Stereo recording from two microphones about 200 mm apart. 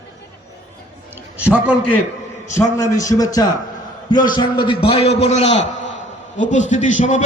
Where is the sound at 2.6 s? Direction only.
15° left (ahead or behind); by 7.2 s 40° left (ahead or behind).